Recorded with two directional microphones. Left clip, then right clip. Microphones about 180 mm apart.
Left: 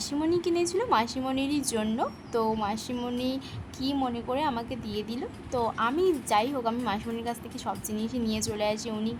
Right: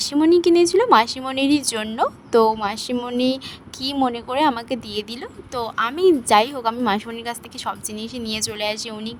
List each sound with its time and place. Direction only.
0.0 s a woman's voice: 40° right (ahead or behind)